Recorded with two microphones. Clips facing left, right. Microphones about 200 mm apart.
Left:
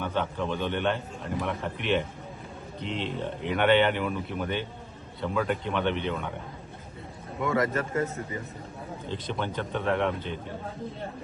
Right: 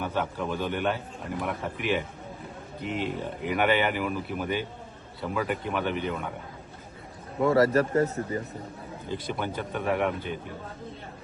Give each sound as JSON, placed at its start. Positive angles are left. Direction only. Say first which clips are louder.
{"t": 0.0, "sound": "speech", "louder": "even", "side_deg": -10}
{"t": 7.4, "sound": "speech", "louder": "right 5 dB", "side_deg": -35}
{"t": 9.0, "sound": "speech", "louder": "right 1 dB", "side_deg": -10}